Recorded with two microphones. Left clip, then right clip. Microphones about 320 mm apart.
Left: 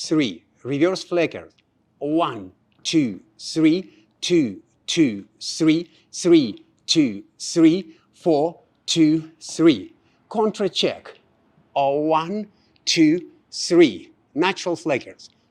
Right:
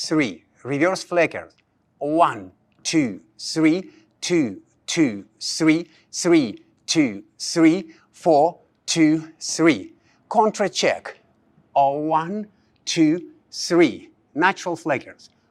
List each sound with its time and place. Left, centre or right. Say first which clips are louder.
0.0 s speech: even; right
11.7 s speech: right 1 dB; right